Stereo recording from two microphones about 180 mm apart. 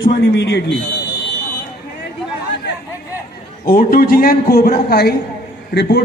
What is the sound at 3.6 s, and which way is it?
A man's voice, 55° left (ahead or behind).